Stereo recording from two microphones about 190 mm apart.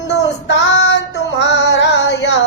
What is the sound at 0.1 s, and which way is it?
Child singing, 70° left (ahead or behind).